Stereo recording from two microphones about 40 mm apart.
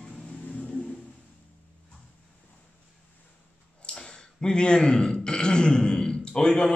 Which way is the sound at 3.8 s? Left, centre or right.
Left.